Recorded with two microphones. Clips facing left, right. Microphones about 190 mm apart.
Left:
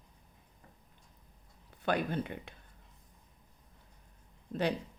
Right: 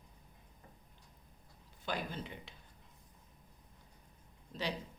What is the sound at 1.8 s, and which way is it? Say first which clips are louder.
Speech: left 8 dB; 60° left (ahead or behind).